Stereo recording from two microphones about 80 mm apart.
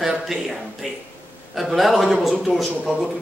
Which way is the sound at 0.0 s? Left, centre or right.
Centre.